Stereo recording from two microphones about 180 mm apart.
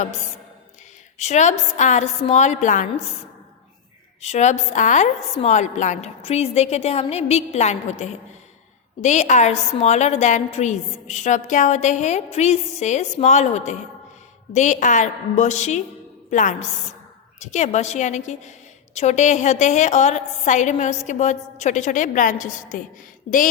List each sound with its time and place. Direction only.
1.2 s a woman's voice: 40° left (ahead or behind)
4.2 s a woman's voice: 40° left (ahead or behind)